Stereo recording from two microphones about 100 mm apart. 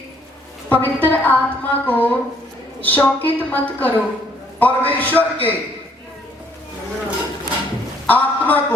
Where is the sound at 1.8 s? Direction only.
15° left (ahead or behind).